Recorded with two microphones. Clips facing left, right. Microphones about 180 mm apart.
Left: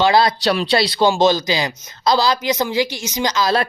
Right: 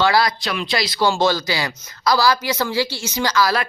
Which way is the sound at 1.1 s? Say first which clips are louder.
Left 3 dB; 20° left (ahead or behind).